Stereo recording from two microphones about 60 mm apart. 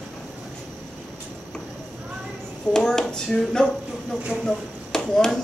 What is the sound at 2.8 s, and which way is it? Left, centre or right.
Speech, centre.